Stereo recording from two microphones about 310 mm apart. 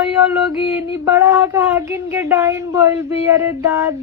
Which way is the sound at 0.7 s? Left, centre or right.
Centre.